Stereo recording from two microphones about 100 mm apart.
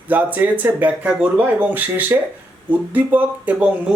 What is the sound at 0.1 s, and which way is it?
A man's voice, 15° right (ahead or behind).